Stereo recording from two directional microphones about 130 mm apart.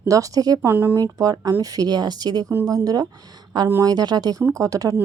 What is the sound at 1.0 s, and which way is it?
Speech, 25° right (ahead or behind).